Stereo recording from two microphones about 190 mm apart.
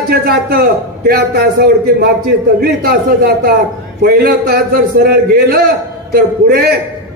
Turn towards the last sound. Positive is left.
turn(degrees=-55)  # may be behind; listen again after turning